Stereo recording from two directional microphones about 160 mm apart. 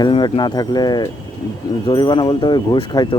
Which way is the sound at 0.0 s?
30° left (ahead or behind).